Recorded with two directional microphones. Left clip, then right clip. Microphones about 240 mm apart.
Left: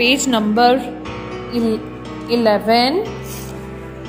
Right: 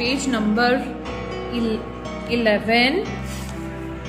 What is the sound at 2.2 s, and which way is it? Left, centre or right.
Speech, centre.